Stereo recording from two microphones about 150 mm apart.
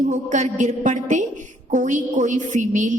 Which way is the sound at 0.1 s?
55° right (ahead or behind).